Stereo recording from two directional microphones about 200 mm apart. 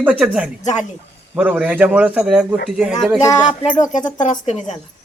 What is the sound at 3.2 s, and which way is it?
Music, 20° left (ahead or behind).